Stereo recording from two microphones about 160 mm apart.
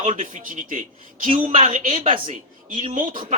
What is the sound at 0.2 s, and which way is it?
Speech, 55° right (ahead or behind).